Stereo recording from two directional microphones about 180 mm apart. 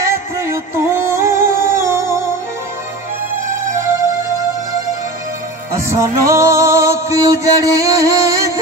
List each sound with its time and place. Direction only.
0.0 s music: 15° right (ahead or behind)
5.9 s music: 15° right (ahead or behind)